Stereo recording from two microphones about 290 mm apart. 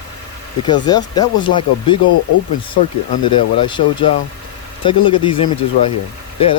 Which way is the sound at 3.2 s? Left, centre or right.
Centre.